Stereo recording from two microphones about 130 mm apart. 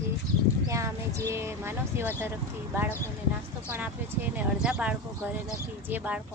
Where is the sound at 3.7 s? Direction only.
15° right (ahead or behind).